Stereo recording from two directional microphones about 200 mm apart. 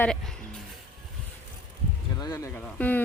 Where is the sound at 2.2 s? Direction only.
15° left (ahead or behind).